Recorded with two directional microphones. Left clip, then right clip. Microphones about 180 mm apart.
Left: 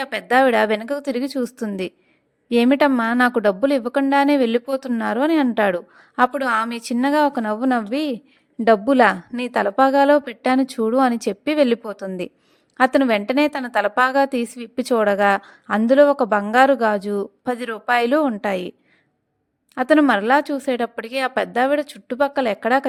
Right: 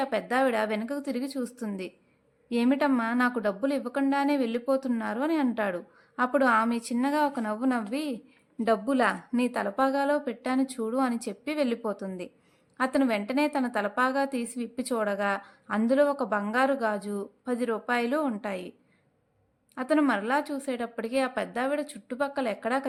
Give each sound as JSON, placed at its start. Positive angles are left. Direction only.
{"t": 0.0, "sound": "a woman's voice", "side_deg": 45}
{"t": 19.7, "sound": "a woman's voice", "side_deg": 45}